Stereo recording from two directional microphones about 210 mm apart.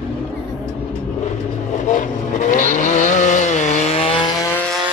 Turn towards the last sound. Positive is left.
turn(degrees=5)  # may be behind; listen again after turning